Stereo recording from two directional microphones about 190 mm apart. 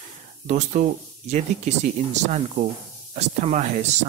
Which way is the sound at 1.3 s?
40° right (ahead or behind).